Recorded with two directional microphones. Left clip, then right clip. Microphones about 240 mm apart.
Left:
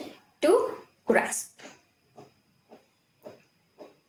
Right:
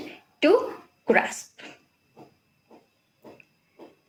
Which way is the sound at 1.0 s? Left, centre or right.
Right.